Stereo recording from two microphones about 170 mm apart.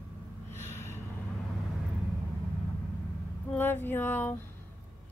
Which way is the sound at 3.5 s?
10° left (ahead or behind).